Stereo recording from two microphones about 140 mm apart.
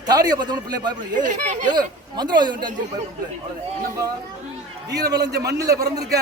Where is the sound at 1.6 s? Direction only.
30° right (ahead or behind).